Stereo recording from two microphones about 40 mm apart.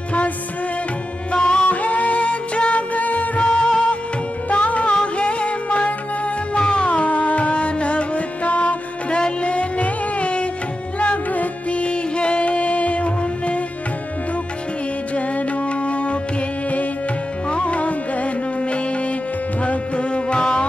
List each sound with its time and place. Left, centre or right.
1.3 s music: left
1.7 s music: left
3.4 s music of bollywood: left
4.5 s music: left
15.1 s music: left
17.5 s music: left